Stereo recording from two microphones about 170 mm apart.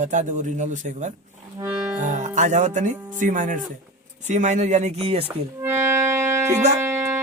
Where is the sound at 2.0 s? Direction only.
45° right (ahead or behind).